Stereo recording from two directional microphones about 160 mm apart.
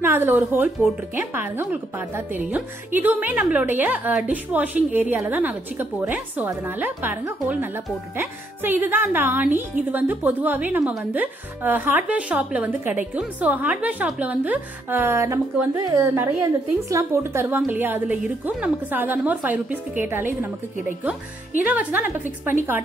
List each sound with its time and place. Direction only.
0.0 s speech: 15° right (ahead or behind)
21.6 s speech: 10° right (ahead or behind)